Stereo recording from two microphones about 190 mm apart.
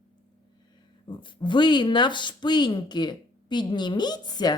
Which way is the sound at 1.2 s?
25° left (ahead or behind).